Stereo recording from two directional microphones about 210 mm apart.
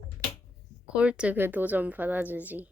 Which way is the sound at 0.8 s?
5° right (ahead or behind).